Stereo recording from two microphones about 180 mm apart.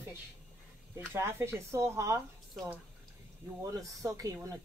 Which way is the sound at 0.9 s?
15° right (ahead or behind).